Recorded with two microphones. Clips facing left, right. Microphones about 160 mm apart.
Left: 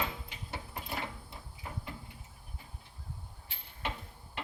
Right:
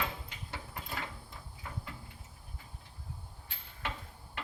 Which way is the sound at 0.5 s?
25° left (ahead or behind).